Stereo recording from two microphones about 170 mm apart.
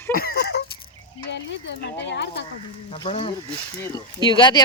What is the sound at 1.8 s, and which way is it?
Speech, 90° left.